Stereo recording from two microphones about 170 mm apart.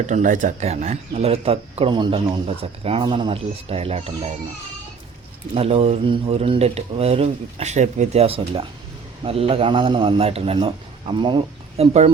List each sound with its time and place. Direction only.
0.0 s speech: 45° right (ahead or behind)
5.5 s speech: 35° right (ahead or behind)